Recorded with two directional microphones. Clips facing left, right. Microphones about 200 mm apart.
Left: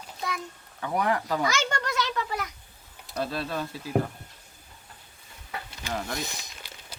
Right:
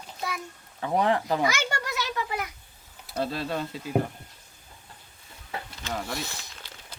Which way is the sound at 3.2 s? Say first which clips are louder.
Right 1 dB; 25° right (ahead or behind).